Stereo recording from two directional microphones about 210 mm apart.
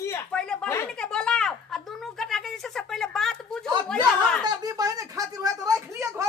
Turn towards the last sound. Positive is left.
turn(degrees=-15)  # may be behind; listen again after turning